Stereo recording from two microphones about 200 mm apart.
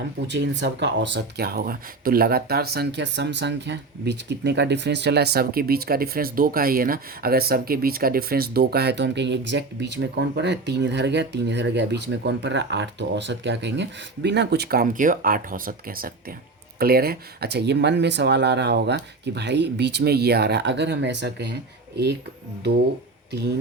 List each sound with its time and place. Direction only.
0.3 s speech: 65° right (ahead or behind)
23.3 s speech: 55° right (ahead or behind)